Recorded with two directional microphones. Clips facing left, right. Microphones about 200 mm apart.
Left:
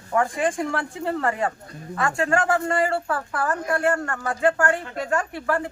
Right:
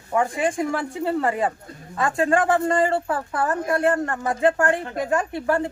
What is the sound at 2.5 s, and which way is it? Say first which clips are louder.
Speech: right 2 dB; 20° right (ahead or behind).